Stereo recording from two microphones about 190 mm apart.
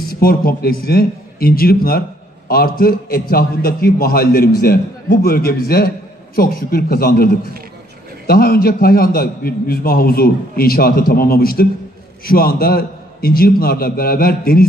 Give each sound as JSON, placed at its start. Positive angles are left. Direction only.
{"t": 0.1, "sound": "a man's voice", "side_deg": 50}